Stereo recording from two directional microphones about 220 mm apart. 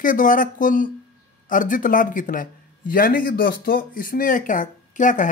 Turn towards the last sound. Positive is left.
turn(degrees=35)  # may be behind; listen again after turning